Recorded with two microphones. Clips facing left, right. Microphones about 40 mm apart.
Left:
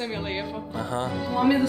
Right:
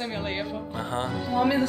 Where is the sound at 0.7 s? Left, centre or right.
Right.